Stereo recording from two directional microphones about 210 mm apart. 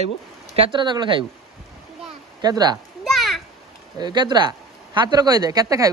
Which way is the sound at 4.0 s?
20° right (ahead or behind).